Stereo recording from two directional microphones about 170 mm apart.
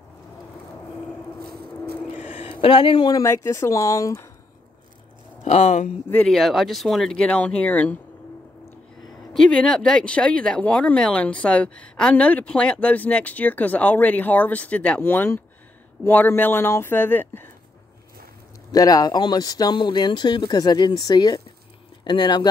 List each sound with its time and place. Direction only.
2.6 s speech: 30° left (ahead or behind)
5.4 s speech: 40° left (ahead or behind)
6.0 s speech: 10° left (ahead or behind)
6.3 s speech: centre (ahead or behind)
9.3 s speech: 5° left (ahead or behind)
18.7 s speech: 20° left (ahead or behind)